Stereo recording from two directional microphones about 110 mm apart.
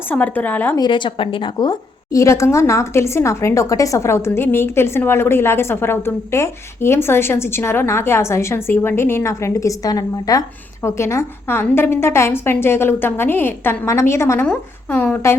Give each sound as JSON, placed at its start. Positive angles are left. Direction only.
{"t": 0.1, "sound": "a woman's voice", "side_deg": 15}
{"t": 0.8, "sound": "a woman's voice", "side_deg": 45}
{"t": 2.1, "sound": "a woman's voice", "side_deg": 25}